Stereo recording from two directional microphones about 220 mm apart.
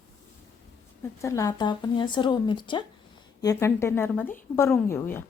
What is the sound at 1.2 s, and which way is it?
A woman's voice, 15° left (ahead or behind).